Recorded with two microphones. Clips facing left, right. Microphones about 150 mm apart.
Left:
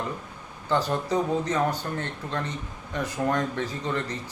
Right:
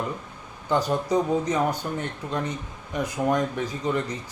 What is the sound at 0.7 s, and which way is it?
Speech, 15° right (ahead or behind).